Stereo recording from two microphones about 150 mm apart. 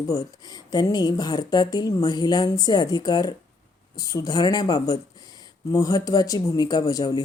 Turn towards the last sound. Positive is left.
turn(degrees=25)  # may be behind; listen again after turning